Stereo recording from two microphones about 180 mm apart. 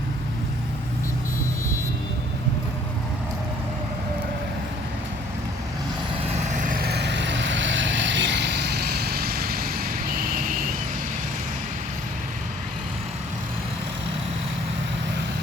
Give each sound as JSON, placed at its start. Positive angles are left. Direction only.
{"t": 6.2, "sound": "vehicle", "side_deg": -40}